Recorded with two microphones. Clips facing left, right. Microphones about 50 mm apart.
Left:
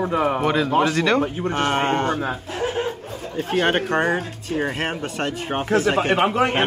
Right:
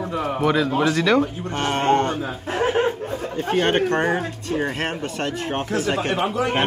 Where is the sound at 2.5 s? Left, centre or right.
Right.